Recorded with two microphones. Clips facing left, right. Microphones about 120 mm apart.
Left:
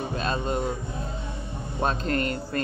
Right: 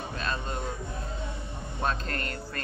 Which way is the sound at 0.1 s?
20° left (ahead or behind).